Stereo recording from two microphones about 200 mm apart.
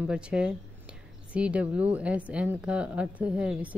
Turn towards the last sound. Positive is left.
turn(degrees=-5)  # may be behind; listen again after turning